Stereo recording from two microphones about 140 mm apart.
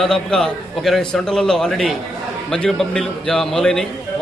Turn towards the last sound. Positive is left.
turn(degrees=5)  # may be behind; listen again after turning